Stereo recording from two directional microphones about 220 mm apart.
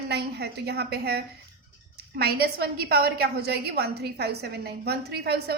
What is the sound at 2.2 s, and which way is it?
A woman's voice, 45° right (ahead or behind).